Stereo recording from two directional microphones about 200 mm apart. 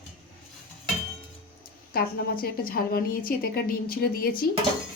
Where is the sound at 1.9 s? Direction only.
50° left (ahead or behind).